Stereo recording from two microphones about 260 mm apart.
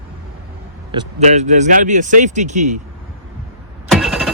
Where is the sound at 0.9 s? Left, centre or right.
Right.